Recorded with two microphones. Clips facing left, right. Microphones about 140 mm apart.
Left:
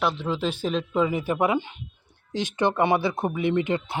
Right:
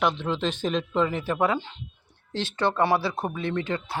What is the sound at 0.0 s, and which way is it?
Speech, 5° left (ahead or behind).